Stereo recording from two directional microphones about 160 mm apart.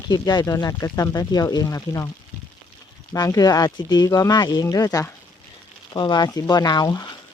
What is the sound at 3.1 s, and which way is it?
Speech, 20° left (ahead or behind).